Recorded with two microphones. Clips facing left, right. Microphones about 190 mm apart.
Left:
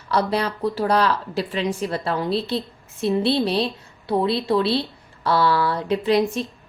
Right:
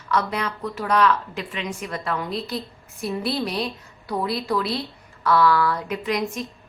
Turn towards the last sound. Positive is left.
turn(degrees=30)  # may be behind; listen again after turning